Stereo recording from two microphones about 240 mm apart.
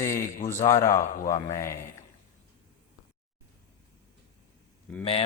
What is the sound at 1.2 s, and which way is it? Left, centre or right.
Mantra, centre.